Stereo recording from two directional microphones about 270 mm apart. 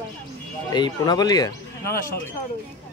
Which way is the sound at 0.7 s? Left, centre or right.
Centre.